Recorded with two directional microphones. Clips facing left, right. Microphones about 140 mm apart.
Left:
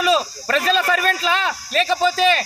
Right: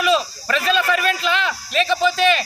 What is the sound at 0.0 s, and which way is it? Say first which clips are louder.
Speech: even; 40° left (ahead or behind).